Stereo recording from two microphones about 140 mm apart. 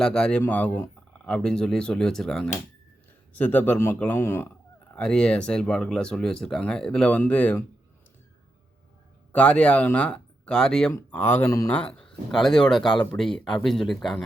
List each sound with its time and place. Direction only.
0.0 s speech: 5° left (ahead or behind)
4.9 s speech: 5° left (ahead or behind)
9.3 s speech: 10° left (ahead or behind)
11.7 s speech: 10° left (ahead or behind)